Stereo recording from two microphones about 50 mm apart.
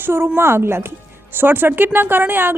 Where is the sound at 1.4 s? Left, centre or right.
Right.